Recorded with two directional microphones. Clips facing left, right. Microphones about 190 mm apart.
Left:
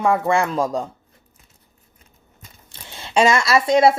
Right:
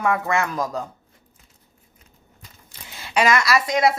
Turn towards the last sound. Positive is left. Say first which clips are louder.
# left 5 dB
turn(degrees=25)  # may be behind; listen again after turning